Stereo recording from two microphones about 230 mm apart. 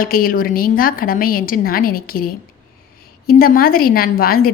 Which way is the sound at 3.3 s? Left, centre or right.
Left.